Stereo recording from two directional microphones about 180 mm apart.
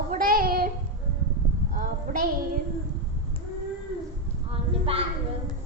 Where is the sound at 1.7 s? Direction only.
50° right (ahead or behind).